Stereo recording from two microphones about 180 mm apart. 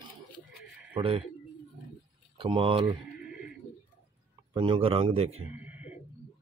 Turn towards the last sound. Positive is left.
turn(degrees=-10)  # may be behind; listen again after turning